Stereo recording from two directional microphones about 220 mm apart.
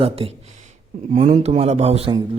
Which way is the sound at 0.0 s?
25° right (ahead or behind).